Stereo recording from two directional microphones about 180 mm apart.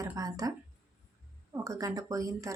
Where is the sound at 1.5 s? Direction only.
15° right (ahead or behind).